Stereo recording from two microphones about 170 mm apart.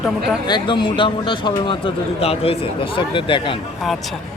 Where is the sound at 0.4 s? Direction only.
25° left (ahead or behind).